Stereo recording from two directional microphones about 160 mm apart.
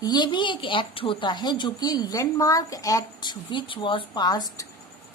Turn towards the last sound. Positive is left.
turn(degrees=25)  # may be behind; listen again after turning